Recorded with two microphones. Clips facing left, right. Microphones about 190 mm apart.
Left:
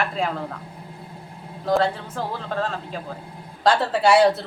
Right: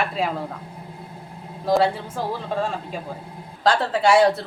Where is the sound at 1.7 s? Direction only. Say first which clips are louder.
Right 2 dB; 5° right (ahead or behind).